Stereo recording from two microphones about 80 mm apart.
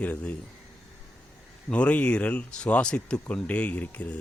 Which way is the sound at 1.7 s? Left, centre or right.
Centre.